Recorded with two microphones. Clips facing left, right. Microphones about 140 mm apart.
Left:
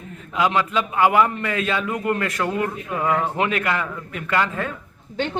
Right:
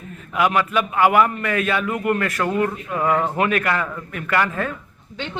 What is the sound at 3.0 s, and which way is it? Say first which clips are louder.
Speech: right 2 dB; 20° right (ahead or behind).